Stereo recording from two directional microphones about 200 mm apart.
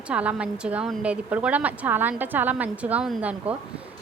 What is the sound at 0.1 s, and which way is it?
A woman's voice, 5° right (ahead or behind).